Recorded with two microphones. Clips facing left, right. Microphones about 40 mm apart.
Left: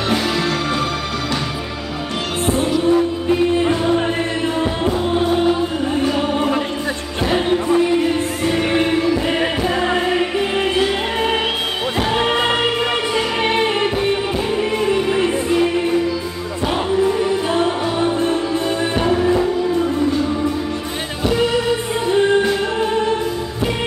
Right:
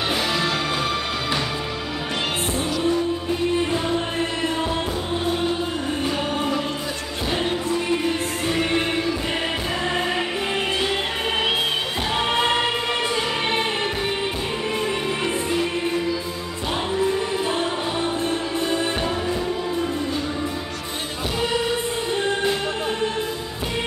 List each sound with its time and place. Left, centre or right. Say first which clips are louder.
2.9 s music: left 7 dB; left
7.3 s music: left 8 dB; centre
12.2 s music: left 2 dB; centre
17.5 s music: left 6 dB; centre